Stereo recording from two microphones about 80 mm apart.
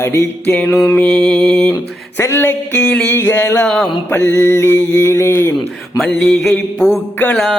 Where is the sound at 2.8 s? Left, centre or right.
Centre.